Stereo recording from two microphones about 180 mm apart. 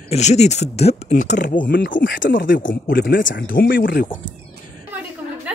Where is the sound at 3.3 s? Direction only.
90° left.